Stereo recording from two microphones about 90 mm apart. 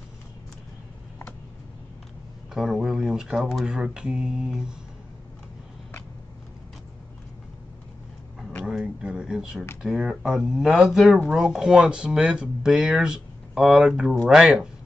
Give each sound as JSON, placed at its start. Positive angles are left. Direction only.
{"t": 2.5, "sound": "speech", "side_deg": -5}
{"t": 8.6, "sound": "a sound", "side_deg": -10}
{"t": 9.8, "sound": "speech", "side_deg": -5}